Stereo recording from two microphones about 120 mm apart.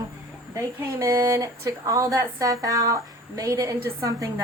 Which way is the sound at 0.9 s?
25° right (ahead or behind).